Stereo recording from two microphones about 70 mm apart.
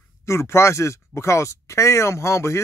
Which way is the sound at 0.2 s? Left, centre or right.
Left.